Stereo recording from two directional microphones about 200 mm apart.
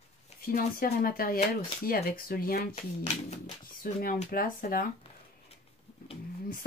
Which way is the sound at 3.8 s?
45° left (ahead or behind).